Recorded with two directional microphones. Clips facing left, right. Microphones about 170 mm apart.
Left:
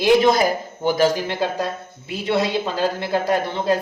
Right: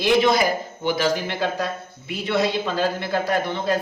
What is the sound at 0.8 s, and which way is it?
Speech, 40° left (ahead or behind).